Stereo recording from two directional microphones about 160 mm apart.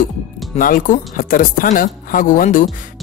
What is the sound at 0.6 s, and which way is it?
Speech, 60° left (ahead or behind).